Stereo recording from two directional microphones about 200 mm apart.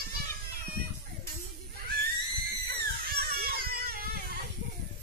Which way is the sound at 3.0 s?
50° right (ahead or behind).